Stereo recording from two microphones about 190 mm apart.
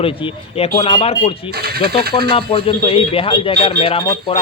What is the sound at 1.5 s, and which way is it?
Speech, 55° right (ahead or behind).